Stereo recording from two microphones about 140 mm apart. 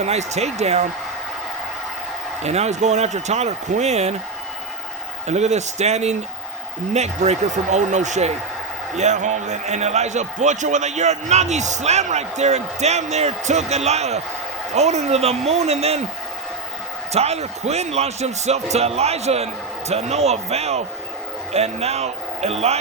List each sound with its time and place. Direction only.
0.0 s a man's voice: 55° right (ahead or behind)
2.4 s a man's voice: 50° right (ahead or behind)
5.2 s a man's voice: 55° right (ahead or behind)
17.1 s a man's voice: 50° right (ahead or behind)